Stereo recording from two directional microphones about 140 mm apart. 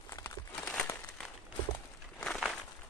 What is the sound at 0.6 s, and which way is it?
Crumpling, 5° left (ahead or behind).